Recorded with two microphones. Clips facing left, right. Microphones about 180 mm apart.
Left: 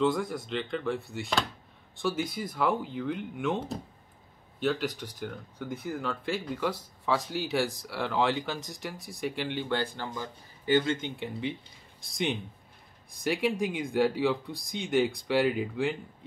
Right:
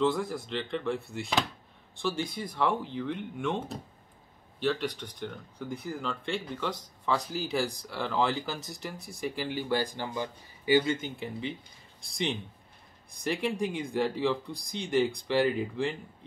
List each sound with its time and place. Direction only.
0.0 s speech: centre (ahead or behind)
4.6 s speech: 5° left (ahead or behind)